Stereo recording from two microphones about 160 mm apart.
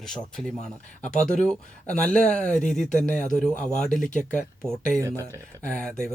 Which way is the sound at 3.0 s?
55° left (ahead or behind).